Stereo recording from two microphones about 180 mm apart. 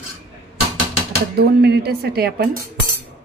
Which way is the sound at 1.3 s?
65° right (ahead or behind).